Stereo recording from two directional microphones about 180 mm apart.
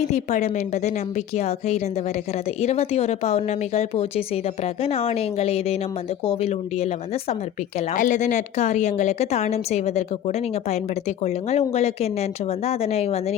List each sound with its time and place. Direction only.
0.1 s a woman's voice: 40° left (ahead or behind)